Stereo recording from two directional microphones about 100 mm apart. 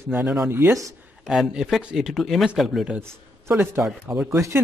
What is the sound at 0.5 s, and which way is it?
Speech, 25° right (ahead or behind).